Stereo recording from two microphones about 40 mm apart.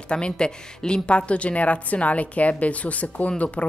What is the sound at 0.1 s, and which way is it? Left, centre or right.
A woman's voice, left.